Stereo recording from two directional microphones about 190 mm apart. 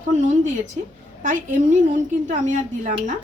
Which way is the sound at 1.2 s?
40° right (ahead or behind).